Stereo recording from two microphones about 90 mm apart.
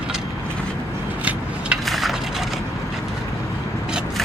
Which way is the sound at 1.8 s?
Centre (ahead or behind).